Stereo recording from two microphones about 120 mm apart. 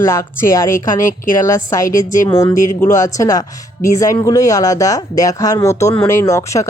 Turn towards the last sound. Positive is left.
turn(degrees=25)  # may be behind; listen again after turning